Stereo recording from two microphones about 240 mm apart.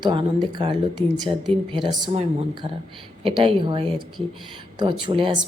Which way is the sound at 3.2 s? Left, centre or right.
Right.